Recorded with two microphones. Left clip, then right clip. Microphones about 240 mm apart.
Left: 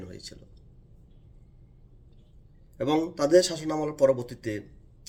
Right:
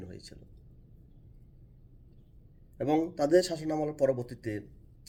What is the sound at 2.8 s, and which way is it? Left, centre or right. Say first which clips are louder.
Speech: left 3 dB; centre.